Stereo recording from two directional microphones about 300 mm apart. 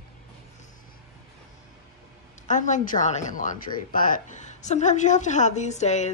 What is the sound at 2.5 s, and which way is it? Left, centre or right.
A woman's voice, left.